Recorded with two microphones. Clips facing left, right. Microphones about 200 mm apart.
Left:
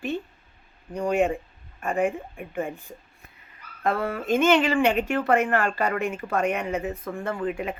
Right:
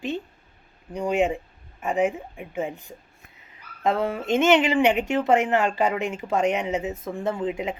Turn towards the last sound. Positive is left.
turn(degrees=-20)  # may be behind; listen again after turning